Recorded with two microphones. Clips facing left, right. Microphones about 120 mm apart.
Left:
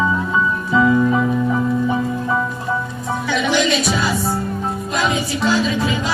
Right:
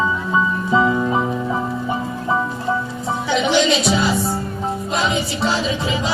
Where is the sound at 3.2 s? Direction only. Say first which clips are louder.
Right 1 dB; 25° right (ahead or behind).